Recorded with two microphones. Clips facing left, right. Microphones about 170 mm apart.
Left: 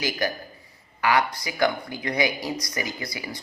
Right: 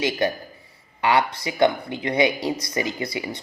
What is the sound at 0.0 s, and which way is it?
A man's voice, 25° right (ahead or behind).